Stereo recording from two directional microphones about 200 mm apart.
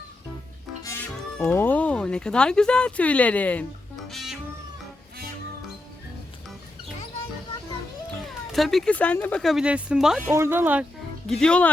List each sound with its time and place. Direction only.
0.8 s speech: 15° left (ahead or behind)
4.1 s cat: centre (ahead or behind)
8.2 s speech: centre (ahead or behind)
11.3 s speech: 5° left (ahead or behind)